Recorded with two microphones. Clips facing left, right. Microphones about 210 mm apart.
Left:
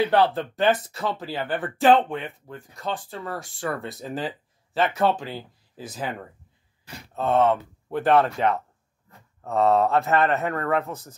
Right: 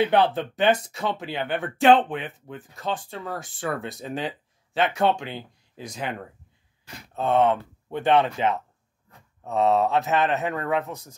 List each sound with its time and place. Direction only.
0.0 s speech: centre (ahead or behind)
9.5 s speech: 20° right (ahead or behind)